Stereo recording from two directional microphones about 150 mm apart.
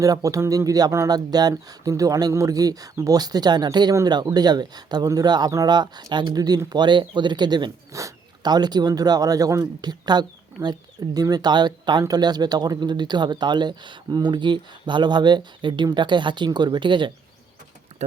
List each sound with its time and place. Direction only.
0.0 s speech: 20° right (ahead or behind)